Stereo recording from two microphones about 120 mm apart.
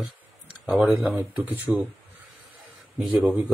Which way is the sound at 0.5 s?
10° right (ahead or behind).